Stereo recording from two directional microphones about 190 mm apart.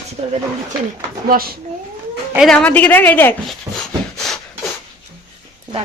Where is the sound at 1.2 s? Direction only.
50° right (ahead or behind).